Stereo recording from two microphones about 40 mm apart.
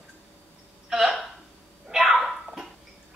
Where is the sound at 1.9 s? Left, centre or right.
Centre.